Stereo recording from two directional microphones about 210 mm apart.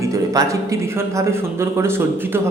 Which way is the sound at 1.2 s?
10° right (ahead or behind).